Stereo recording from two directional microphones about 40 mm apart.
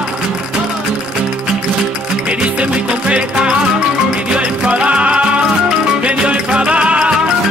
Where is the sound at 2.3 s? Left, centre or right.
Right.